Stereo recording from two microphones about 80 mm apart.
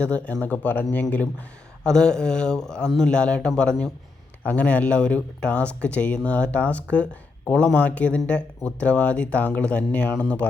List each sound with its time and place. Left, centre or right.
0.0 s speech: centre
1.8 s speech: centre